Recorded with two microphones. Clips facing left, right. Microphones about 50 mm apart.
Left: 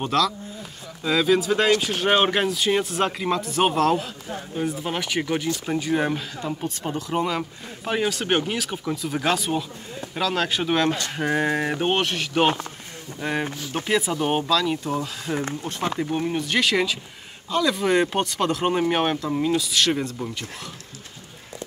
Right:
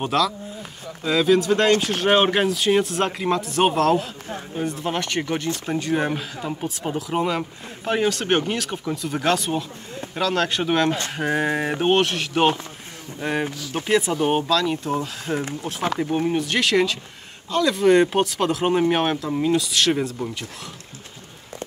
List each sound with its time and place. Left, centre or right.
0.0 s speech: centre
14.9 s speech: centre